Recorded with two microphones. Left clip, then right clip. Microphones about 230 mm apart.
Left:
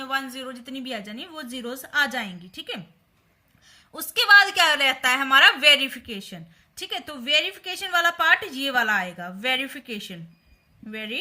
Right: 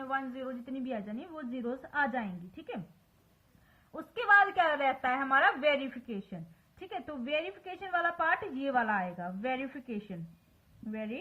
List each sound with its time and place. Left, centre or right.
0.0 s a woman's voice: left
3.9 s a woman's voice: left